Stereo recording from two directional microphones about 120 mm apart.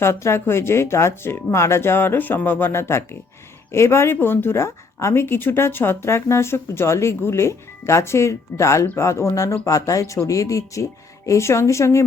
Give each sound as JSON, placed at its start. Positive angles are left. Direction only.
{"t": 0.0, "sound": "speech", "side_deg": 20}